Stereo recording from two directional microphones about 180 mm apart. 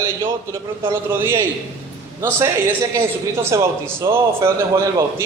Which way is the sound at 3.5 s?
20° right (ahead or behind).